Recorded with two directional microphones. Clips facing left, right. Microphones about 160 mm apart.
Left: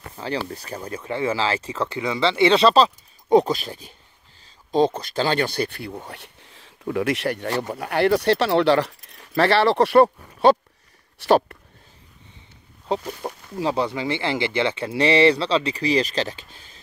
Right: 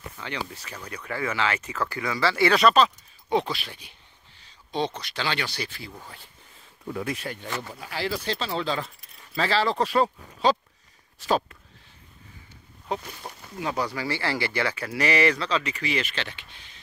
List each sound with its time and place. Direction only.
0.1 s speech: 35° left (ahead or behind); by 11.5 s 70° left (ahead or behind)
12.9 s speech: 30° left (ahead or behind)